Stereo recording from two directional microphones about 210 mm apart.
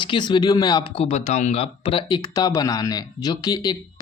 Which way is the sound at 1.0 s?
30° left (ahead or behind).